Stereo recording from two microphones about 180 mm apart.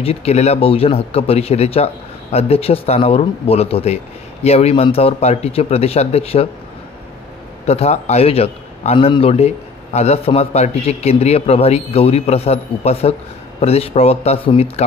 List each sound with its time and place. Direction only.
0.0 s speech: 35° left (ahead or behind)
7.6 s speech: 35° left (ahead or behind)